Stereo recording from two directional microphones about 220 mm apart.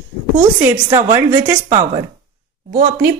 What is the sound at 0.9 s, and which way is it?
Speech, 15° right (ahead or behind).